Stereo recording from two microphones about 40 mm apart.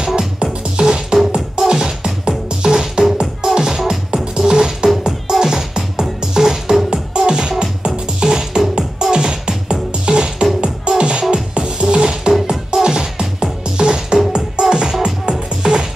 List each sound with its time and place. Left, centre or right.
0.4 s music: right